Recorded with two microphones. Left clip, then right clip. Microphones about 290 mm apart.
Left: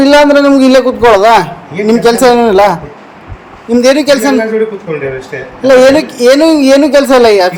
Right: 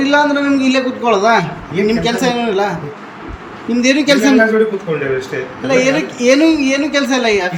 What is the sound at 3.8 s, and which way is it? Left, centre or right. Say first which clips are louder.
Speech: left 5 dB; centre.